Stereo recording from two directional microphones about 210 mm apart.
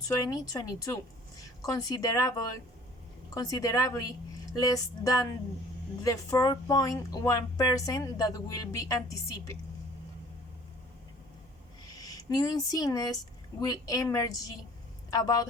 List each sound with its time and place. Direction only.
0.3 s speech: 15° left (ahead or behind)
11.9 s speech: 20° left (ahead or behind)